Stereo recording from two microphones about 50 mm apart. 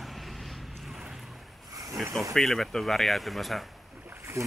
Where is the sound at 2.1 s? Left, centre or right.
Centre.